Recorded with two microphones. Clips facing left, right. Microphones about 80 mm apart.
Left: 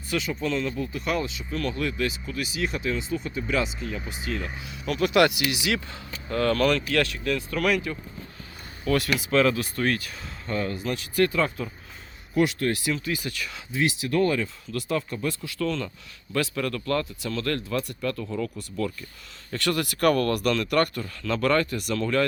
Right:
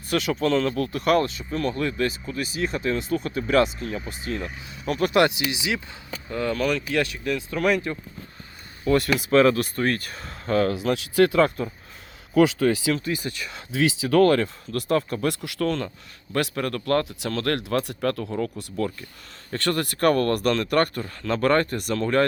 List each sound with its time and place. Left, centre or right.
0.1 s speech: right
0.4 s speech: right
9.0 s speech: right
10.4 s speech: right
11.3 s speech: right
13.1 s speech: right
13.7 s speech: right
18.3 s speech: right